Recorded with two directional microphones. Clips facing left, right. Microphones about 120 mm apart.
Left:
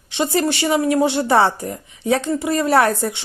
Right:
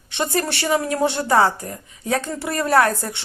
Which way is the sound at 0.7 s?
5° left (ahead or behind).